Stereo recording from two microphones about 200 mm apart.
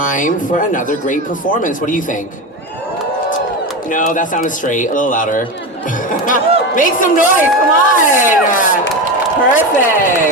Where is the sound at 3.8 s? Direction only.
40° left (ahead or behind).